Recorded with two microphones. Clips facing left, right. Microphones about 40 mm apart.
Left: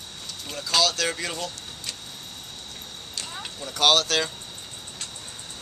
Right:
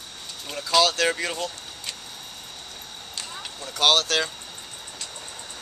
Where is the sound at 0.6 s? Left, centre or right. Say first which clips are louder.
Right 3 dB; right.